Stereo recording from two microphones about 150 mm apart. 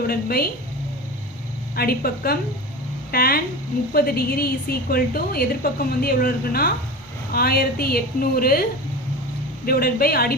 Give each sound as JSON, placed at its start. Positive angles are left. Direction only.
{"t": 0.1, "sound": "a woman's voice", "side_deg": 90}
{"t": 1.7, "sound": "a woman's voice", "side_deg": 90}
{"t": 9.6, "sound": "a woman's voice", "side_deg": 85}